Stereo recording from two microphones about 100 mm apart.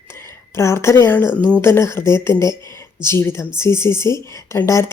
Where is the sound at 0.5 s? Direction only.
25° left (ahead or behind).